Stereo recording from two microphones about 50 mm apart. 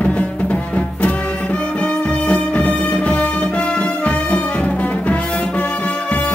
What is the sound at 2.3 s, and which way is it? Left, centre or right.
Music, left.